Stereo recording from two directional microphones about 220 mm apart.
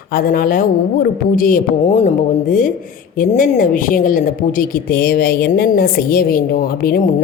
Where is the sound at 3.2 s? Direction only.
40° left (ahead or behind).